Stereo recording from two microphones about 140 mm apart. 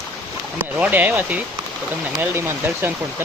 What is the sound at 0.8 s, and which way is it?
Speech, 10° right (ahead or behind).